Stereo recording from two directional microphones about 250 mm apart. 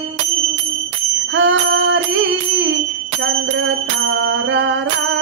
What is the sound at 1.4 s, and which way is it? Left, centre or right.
Bicycle bell, right.